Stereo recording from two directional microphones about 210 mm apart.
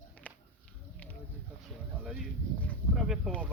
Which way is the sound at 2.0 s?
5° left (ahead or behind).